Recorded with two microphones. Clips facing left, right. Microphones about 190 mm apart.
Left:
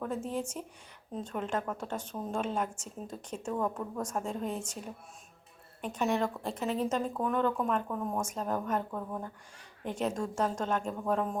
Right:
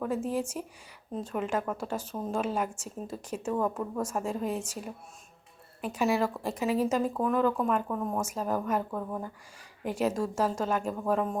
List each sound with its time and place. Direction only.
0.0 s a woman's voice: 5° right (ahead or behind)